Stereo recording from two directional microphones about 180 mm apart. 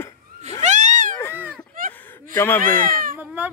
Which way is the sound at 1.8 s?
50° right (ahead or behind).